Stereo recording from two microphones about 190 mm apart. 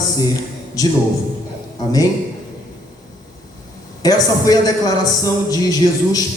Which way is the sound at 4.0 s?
20° left (ahead or behind).